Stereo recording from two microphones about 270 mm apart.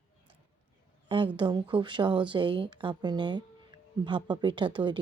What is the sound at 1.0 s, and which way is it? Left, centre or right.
A woman's voice, centre.